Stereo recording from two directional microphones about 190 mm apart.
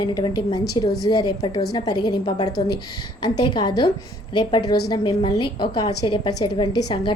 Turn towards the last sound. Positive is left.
turn(degrees=25)  # may be behind; listen again after turning